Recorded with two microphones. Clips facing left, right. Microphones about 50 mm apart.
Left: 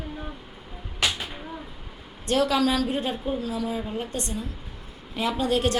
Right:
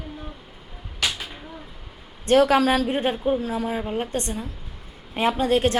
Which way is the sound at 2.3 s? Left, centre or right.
Right.